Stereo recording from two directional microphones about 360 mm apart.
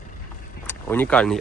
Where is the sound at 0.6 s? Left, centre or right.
Centre.